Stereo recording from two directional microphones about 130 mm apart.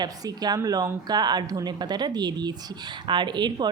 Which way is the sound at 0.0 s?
30° right (ahead or behind).